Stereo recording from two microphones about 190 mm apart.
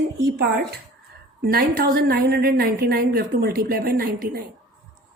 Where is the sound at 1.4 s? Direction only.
55° right (ahead or behind).